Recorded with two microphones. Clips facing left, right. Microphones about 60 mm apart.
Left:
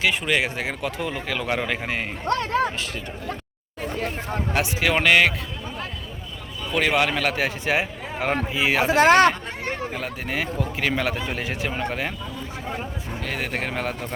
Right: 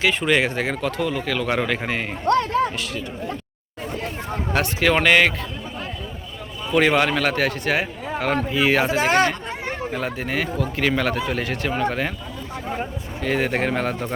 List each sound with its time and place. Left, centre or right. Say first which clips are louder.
0.0 s speech: right 3 dB; centre
2.7 s speech: right 2 dB; left
4.5 s speech: right 3 dB; centre
6.7 s speech: right 3 dB; centre
7.4 s speech: right 2 dB; centre
9.0 s speech: left 8 dB; left
9.9 s speech: right 3 dB; centre
13.2 s speech: right 7 dB; centre